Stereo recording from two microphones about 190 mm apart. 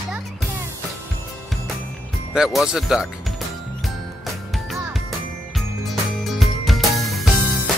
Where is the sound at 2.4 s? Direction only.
Centre (ahead or behind).